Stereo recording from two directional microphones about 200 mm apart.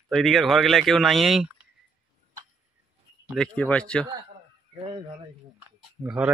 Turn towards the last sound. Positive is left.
turn(degrees=-10)  # may be behind; listen again after turning